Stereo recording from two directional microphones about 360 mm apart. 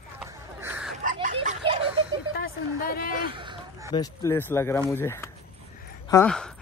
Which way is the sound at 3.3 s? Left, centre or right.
Centre.